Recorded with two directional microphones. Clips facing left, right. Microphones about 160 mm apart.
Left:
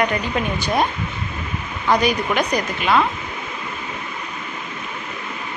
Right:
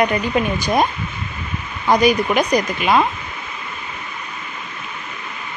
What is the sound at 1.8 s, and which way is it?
A woman's voice, 10° right (ahead or behind).